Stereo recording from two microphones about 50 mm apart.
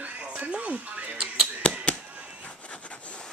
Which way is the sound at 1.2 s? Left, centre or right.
Centre.